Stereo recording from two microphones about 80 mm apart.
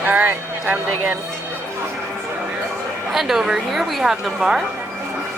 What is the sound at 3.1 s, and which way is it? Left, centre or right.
A woman's voice, centre.